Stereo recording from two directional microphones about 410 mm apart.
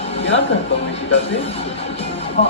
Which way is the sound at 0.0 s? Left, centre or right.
Centre.